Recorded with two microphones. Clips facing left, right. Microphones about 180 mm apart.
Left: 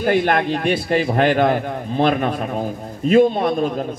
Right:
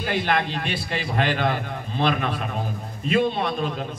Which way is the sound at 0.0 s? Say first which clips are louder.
Left 7 dB; 50° left (ahead or behind).